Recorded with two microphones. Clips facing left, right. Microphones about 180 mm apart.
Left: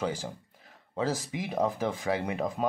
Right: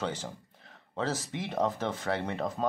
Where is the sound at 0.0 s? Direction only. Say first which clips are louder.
Left 2 dB; 10° left (ahead or behind).